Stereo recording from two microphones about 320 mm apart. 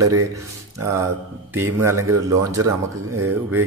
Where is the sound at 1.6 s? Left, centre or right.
Centre.